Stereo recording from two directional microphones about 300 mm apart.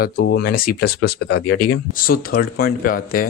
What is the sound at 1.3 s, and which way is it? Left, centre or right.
Speech, left.